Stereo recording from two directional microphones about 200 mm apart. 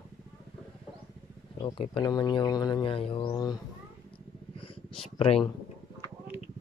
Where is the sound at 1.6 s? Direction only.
25° left (ahead or behind).